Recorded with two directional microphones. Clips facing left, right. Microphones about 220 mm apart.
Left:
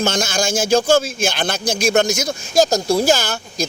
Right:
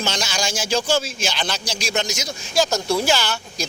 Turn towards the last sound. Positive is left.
turn(degrees=45)  # may be behind; listen again after turning